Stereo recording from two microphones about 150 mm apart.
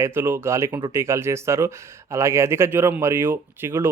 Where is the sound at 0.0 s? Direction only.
15° right (ahead or behind).